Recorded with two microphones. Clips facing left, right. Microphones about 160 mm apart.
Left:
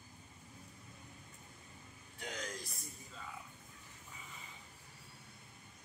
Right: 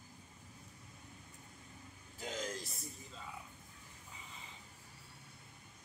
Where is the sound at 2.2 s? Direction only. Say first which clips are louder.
Right 3 dB; 25° right (ahead or behind).